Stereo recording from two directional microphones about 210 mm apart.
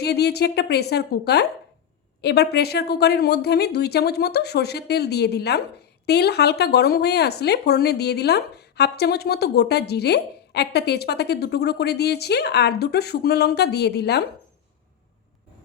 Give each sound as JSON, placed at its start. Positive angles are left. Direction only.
{"t": 0.0, "sound": "speech", "side_deg": 50}